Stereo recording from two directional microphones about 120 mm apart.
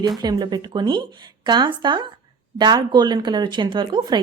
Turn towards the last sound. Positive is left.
turn(degrees=-40)  # may be behind; listen again after turning